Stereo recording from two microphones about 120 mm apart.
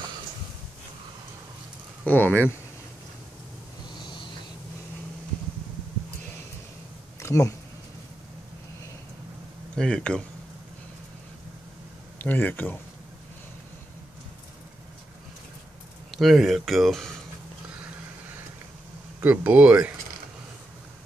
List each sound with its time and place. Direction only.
2.0 s speech: 15° left (ahead or behind)
3.9 s a sound: 40° left (ahead or behind)
7.2 s a sound: 25° left (ahead or behind)
9.8 s speech: 10° left (ahead or behind)
12.2 s speech: 15° left (ahead or behind)
16.1 s speech: centre (ahead or behind)
19.2 s speech: 10° right (ahead or behind)